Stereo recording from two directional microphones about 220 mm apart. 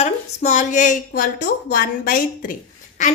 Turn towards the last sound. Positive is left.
turn(degrees=35)  # may be behind; listen again after turning